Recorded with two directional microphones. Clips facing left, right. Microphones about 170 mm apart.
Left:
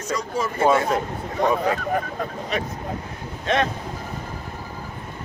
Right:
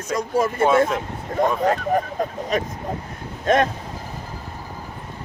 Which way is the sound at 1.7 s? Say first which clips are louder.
Right 3 dB; 40° right (ahead or behind).